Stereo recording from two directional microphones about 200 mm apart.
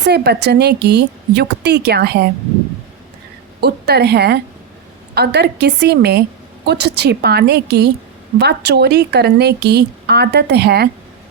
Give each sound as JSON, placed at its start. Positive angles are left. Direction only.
{"t": 0.0, "sound": "a woman's voice", "side_deg": -55}
{"t": 3.6, "sound": "a woman's voice", "side_deg": -55}